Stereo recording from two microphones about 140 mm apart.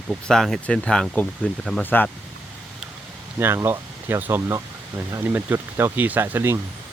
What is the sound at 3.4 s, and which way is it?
Speech, 15° right (ahead or behind).